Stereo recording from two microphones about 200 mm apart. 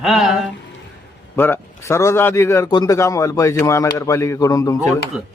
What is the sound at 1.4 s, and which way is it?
A man's voice, 10° left (ahead or behind).